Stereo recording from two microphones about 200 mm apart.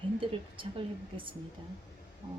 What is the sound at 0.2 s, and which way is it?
Speech, 25° right (ahead or behind).